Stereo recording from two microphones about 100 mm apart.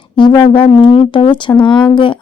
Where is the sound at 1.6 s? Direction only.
50° left (ahead or behind).